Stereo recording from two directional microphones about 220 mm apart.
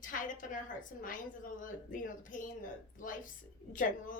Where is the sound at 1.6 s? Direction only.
35° left (ahead or behind).